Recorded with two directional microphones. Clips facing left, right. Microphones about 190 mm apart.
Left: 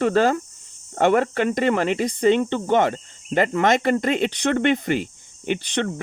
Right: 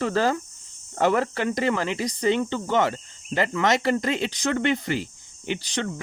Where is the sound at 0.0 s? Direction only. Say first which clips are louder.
Left 4 dB; 60° left (ahead or behind).